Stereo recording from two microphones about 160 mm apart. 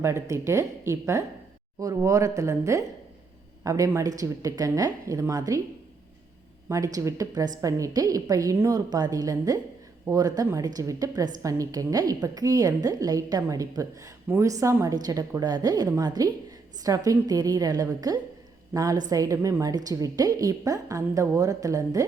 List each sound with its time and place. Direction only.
0.0 s a woman's voice: 15° right (ahead or behind)
6.7 s a woman's voice: 20° right (ahead or behind)